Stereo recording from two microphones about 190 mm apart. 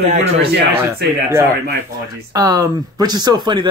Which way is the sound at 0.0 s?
35° right (ahead or behind).